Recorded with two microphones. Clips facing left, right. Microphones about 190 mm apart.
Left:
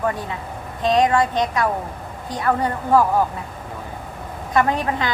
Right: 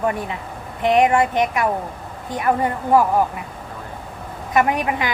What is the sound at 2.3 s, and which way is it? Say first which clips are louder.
Speech: right 1 dB; 20° right (ahead or behind).